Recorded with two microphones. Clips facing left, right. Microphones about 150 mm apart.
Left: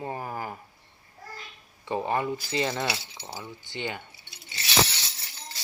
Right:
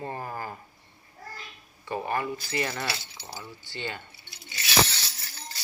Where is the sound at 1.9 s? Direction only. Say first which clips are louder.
Left 2 dB; 20° left (ahead or behind).